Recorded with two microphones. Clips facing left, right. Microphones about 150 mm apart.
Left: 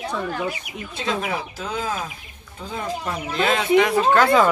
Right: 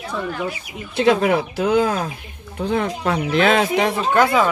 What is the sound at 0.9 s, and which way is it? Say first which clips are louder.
Speech: right 10 dB; 70° right (ahead or behind).